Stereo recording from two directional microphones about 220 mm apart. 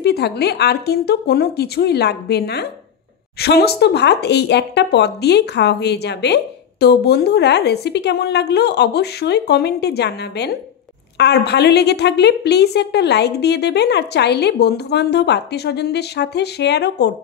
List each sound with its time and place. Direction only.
0.0 s speech: 45° left (ahead or behind)